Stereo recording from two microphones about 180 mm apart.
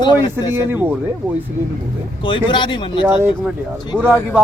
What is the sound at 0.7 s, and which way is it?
Speech, 10° right (ahead or behind).